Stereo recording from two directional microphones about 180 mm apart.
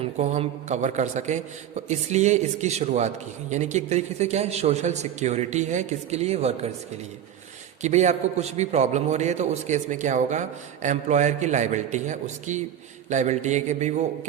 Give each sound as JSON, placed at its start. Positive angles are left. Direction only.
{"t": 0.0, "sound": "a man's voice", "side_deg": -35}
{"t": 7.8, "sound": "a man's voice", "side_deg": -40}